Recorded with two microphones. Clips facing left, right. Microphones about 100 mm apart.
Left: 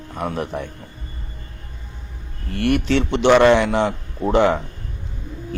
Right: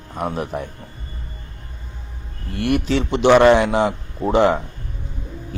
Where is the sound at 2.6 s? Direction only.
25° right (ahead or behind).